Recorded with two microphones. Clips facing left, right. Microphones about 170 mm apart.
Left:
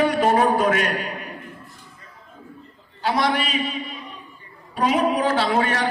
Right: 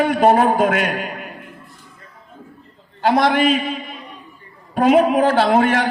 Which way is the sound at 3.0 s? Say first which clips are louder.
Right 6 dB; 90° right.